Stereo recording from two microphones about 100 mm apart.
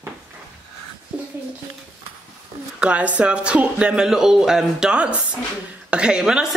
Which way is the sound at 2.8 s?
15° right (ahead or behind).